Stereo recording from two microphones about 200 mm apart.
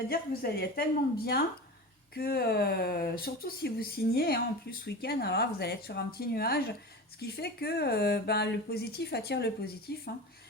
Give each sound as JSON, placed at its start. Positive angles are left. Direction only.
{"t": 0.1, "sound": "speech", "side_deg": 50}